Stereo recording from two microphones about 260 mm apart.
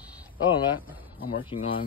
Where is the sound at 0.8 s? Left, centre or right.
Centre.